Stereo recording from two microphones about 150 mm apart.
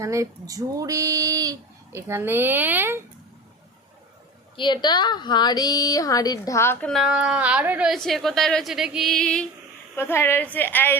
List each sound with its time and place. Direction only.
0.0 s speech: 20° right (ahead or behind)
4.5 s a woman's voice: 30° left (ahead or behind)
6.8 s a woman's voice: centre (ahead or behind)
7.9 s speech: centre (ahead or behind)
9.9 s a woman's voice: 15° left (ahead or behind)